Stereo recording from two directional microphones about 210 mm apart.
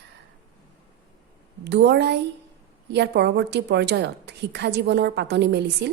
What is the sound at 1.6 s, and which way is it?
A woman's voice, 55° right (ahead or behind).